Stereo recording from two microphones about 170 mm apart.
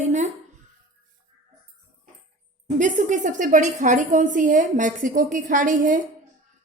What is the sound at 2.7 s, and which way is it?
A woman's voice, 45° right (ahead or behind).